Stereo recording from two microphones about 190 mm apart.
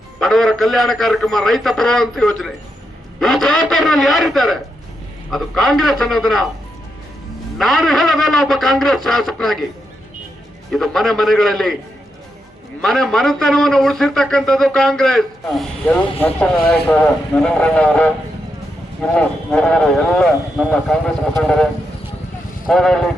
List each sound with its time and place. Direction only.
0.2 s a man's voice: centre (ahead or behind)
7.6 s a man's voice: centre (ahead or behind)
10.7 s a man's voice: centre (ahead or behind)
12.8 s a man's voice: centre (ahead or behind)
19.1 s a man's voice: 5° left (ahead or behind)